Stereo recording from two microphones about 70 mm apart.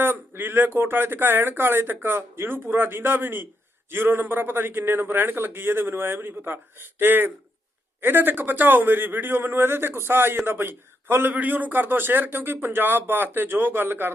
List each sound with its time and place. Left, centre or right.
0.0 s a man's voice: right